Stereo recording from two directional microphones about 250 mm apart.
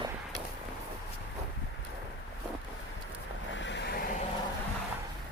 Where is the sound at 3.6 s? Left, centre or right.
Left.